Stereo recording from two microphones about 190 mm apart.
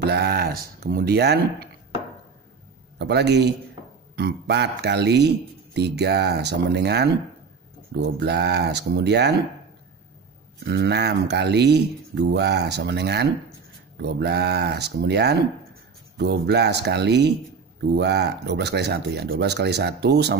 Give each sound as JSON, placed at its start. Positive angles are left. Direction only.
{"t": 0.0, "sound": "speech", "side_deg": -60}
{"t": 3.0, "sound": "speech", "side_deg": -60}
{"t": 8.2, "sound": "speech", "side_deg": -60}
{"t": 10.7, "sound": "speech", "side_deg": -60}